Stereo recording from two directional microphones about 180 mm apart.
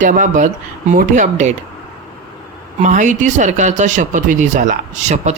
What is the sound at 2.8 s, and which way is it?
Speech, 45° right (ahead or behind).